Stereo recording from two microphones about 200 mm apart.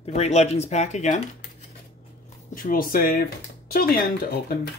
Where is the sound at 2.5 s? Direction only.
45° left (ahead or behind).